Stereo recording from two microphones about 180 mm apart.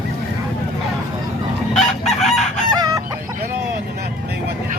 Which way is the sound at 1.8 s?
Centre (ahead or behind).